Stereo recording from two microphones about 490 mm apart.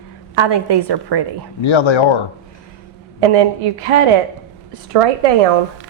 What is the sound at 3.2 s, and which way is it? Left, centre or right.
Speech, right.